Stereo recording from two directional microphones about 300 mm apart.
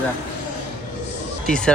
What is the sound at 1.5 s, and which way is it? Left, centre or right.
Speech, centre.